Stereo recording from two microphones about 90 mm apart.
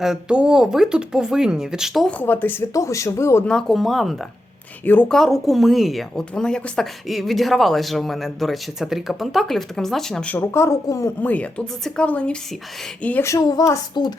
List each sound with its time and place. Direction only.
0.0 s speech: 10° right (ahead or behind)
2.0 s speech: 20° left (ahead or behind)
2.7 s speech: 35° left (ahead or behind)
3.4 s a man's voice: 5° left (ahead or behind)
4.9 s speech: 20° left (ahead or behind)
5.1 s a man's voice: centre (ahead or behind)
10.3 s speech: 25° left (ahead or behind)
11.2 s speech: 15° left (ahead or behind)
13.5 s speech: 40° left (ahead or behind)
14.0 s a woman's voice: 55° left (ahead or behind)